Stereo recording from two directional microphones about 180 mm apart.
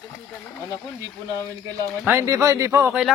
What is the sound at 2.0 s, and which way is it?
Speech, 15° right (ahead or behind).